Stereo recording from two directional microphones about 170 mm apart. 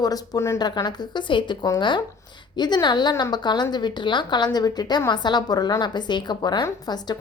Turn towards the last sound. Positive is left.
turn(degrees=25)  # may be behind; listen again after turning